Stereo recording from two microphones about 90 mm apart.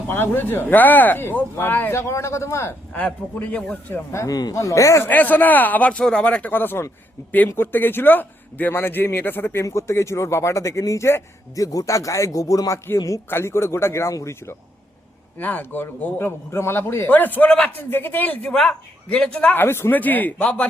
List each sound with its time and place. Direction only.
0.1 s speech: 25° left (ahead or behind)
3.0 s speech: 15° left (ahead or behind)
4.1 s a man's voice: 30° left (ahead or behind)
5.0 s a man's voice: 20° left (ahead or behind); by 14.5 s 35° left (ahead or behind)
15.4 s speech: 20° left (ahead or behind)
18.5 s a man's voice: 10° left (ahead or behind)
19.5 s speech: 25° left (ahead or behind)